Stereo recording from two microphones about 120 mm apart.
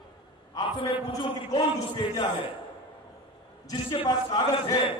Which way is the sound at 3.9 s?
35° left (ahead or behind).